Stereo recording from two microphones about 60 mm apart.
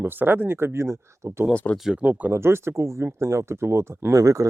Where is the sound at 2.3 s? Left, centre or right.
Right.